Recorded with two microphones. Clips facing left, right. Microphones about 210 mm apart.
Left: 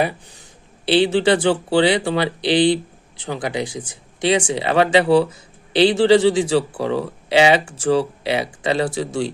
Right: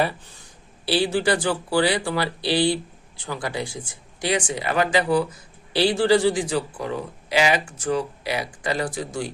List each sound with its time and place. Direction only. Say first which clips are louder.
0.0 s a man's voice: left 3 dB; 15° left (ahead or behind)